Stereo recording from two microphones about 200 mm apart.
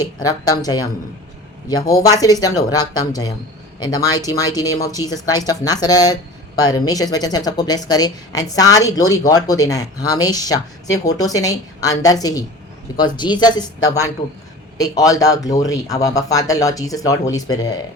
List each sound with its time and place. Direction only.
0.0 s a woman's voice: 20° left (ahead or behind)